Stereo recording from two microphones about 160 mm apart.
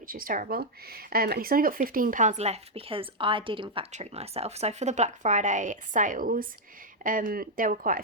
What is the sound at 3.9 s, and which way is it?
Speech, 45° right (ahead or behind).